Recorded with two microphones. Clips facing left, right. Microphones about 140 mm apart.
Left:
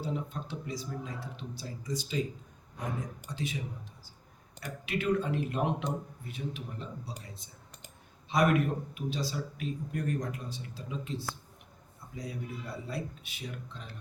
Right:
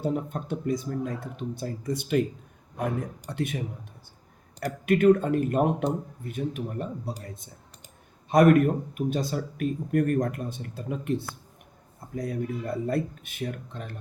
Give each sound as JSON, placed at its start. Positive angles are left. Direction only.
{"t": 0.0, "sound": "speech", "side_deg": -50}
{"t": 4.6, "sound": "speech", "side_deg": -50}